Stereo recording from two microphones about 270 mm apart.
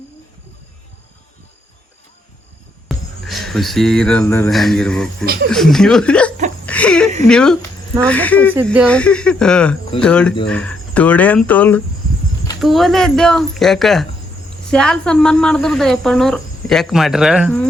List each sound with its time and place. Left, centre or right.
2.9 s speech: centre
5.2 s speech: right
5.5 s speech: centre
6.7 s a sound: centre
7.3 s speech: centre